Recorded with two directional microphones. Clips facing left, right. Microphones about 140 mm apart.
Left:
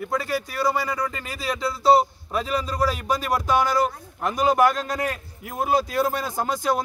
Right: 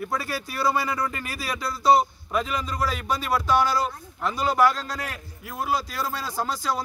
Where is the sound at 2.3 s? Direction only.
35° left (ahead or behind).